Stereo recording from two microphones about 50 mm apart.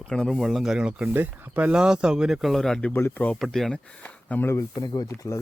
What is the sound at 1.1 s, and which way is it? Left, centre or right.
Speech, right.